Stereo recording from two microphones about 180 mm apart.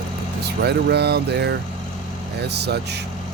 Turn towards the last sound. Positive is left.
turn(degrees=-65)  # may be behind; listen again after turning